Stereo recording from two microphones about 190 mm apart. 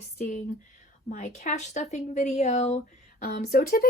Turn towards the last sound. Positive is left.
turn(degrees=50)  # may be behind; listen again after turning